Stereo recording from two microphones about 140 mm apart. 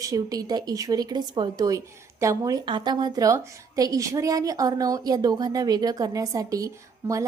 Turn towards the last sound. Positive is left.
turn(degrees=-25)  # may be behind; listen again after turning